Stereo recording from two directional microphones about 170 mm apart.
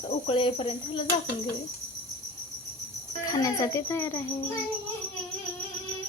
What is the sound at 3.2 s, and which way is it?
Speech, 20° left (ahead or behind).